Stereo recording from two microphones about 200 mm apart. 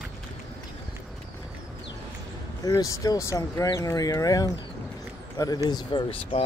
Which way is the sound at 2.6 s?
15° left (ahead or behind).